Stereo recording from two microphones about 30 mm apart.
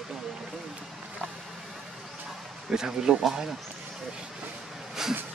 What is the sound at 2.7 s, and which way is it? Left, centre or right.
Speech, right.